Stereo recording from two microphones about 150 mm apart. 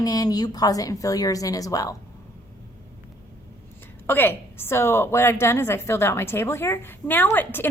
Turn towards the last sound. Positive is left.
turn(degrees=15)  # may be behind; listen again after turning